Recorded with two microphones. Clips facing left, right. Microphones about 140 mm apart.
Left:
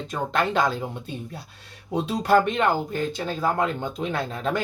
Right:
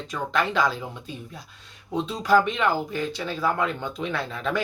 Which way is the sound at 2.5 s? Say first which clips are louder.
Left 2 dB; 50° left (ahead or behind).